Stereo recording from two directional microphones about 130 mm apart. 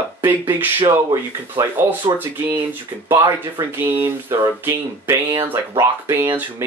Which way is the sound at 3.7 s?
15° right (ahead or behind).